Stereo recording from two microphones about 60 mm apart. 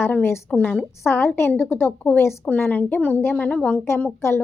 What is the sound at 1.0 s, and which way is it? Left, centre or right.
Speech, left.